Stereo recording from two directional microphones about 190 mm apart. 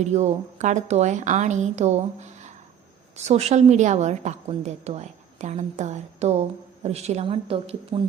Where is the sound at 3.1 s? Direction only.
35° right (ahead or behind).